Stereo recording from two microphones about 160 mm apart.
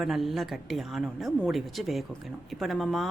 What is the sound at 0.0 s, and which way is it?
A woman's voice, centre (ahead or behind).